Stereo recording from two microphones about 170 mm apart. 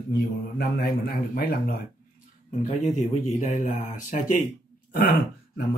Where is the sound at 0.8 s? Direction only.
65° left (ahead or behind).